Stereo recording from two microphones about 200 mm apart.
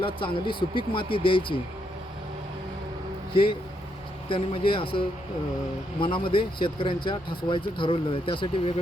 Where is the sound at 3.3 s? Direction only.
25° left (ahead or behind).